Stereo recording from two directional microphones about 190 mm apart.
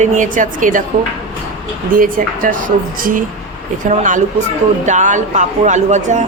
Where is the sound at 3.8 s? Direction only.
40° right (ahead or behind).